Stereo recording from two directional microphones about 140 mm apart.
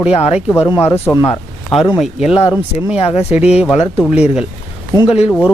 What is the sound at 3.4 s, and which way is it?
Speech, 5° right (ahead or behind).